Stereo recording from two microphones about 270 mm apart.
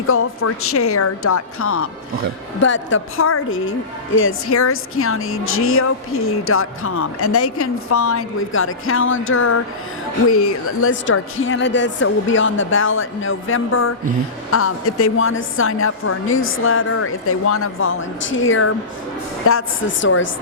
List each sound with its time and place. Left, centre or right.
0.1 s a woman's voice: left